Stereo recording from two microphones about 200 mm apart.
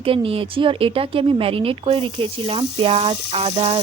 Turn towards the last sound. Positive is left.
turn(degrees=-20)  # may be behind; listen again after turning